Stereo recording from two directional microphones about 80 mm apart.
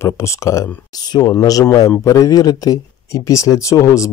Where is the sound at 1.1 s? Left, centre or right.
Left.